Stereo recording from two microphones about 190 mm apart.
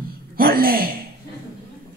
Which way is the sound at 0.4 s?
50° right (ahead or behind).